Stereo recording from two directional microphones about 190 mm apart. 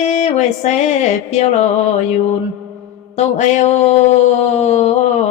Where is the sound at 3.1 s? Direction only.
40° left (ahead or behind).